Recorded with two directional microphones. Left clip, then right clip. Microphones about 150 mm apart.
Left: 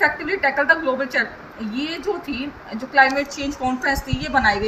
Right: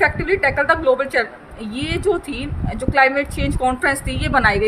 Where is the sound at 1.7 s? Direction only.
90° right.